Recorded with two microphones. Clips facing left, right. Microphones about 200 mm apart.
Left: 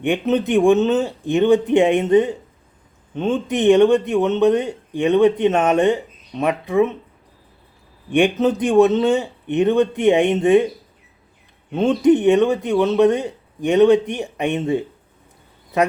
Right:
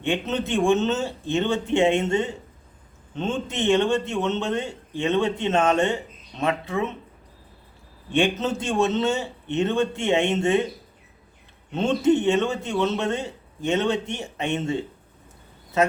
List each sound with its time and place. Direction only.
0.0 s a man's voice: 15° left (ahead or behind)
8.1 s a man's voice: 15° left (ahead or behind)
11.9 s a man's voice: 15° left (ahead or behind)